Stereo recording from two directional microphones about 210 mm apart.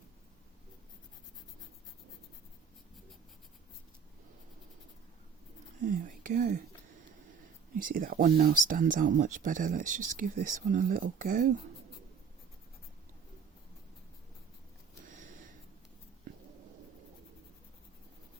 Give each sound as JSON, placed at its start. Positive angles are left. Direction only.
{"t": 5.8, "sound": "whispering", "side_deg": -40}
{"t": 7.8, "sound": "speech", "side_deg": -40}